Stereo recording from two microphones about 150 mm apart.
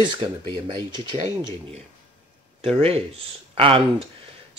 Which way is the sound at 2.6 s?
40° right (ahead or behind).